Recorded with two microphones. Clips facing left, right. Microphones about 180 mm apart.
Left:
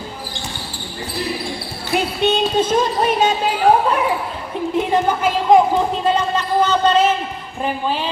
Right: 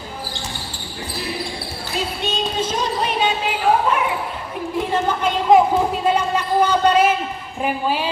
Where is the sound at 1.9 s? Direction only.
60° left (ahead or behind).